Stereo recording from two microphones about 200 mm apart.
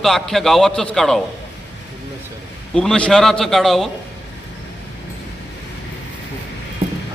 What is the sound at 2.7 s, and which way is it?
A man's voice, 5° left (ahead or behind).